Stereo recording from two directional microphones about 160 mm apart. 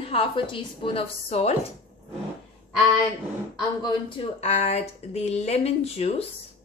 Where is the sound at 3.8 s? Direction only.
35° left (ahead or behind).